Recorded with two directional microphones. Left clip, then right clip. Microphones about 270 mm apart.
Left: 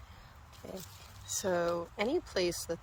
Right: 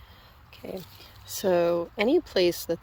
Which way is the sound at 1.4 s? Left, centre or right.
Right.